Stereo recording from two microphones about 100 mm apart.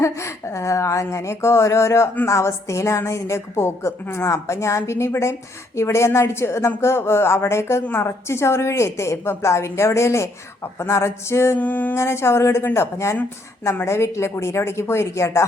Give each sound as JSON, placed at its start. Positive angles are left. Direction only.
{"t": 0.0, "sound": "speech", "side_deg": 30}